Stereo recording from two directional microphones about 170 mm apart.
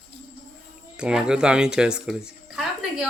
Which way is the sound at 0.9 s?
5° right (ahead or behind).